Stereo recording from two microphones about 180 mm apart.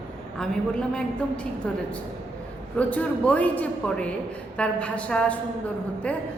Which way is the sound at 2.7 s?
5° left (ahead or behind).